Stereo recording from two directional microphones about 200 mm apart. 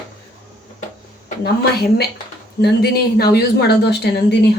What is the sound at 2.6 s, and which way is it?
Speech, 50° left (ahead or behind).